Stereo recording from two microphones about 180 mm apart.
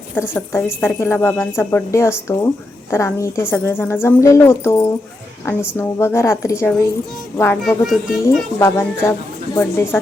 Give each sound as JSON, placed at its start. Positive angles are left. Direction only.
{"t": 0.2, "sound": "speech", "side_deg": 10}
{"t": 7.6, "sound": "a child's voice", "side_deg": 0}
{"t": 8.5, "sound": "speech", "side_deg": 15}